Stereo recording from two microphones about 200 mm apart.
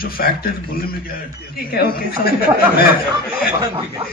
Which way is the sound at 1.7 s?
50° left (ahead or behind).